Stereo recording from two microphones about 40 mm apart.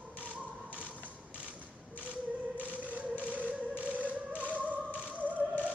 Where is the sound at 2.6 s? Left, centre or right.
Right.